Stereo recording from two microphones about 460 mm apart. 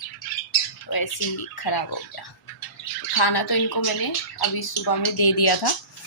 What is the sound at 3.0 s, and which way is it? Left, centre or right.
Speech, left.